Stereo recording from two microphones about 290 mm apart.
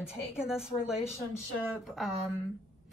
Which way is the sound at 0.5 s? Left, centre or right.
Centre.